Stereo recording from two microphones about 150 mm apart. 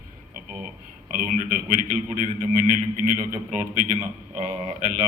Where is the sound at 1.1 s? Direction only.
65° right (ahead or behind).